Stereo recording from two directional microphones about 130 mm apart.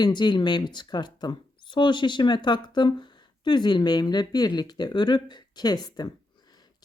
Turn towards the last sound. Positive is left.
turn(degrees=30)  # may be behind; listen again after turning